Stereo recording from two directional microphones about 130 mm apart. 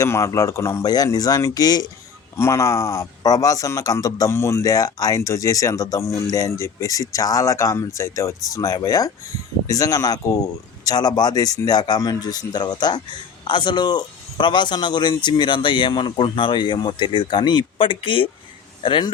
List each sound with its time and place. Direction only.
0.0 s speech: 25° left (ahead or behind); by 19.1 s 40° left (ahead or behind)